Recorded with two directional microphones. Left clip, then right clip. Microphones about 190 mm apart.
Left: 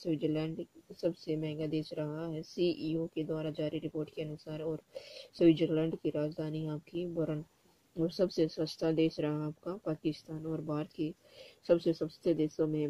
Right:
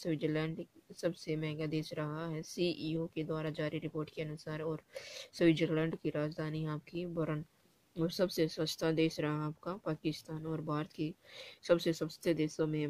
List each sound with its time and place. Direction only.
0.0 s speech: 5° right (ahead or behind)
10.2 s speech: 20° right (ahead or behind)
10.5 s speech: 5° right (ahead or behind)